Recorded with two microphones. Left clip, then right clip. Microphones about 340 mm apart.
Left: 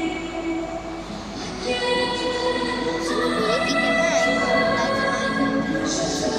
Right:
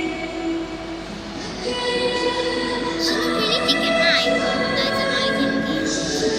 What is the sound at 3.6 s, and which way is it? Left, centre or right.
Music, centre.